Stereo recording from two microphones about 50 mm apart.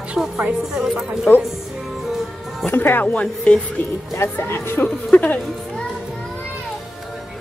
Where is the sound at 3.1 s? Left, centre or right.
Left.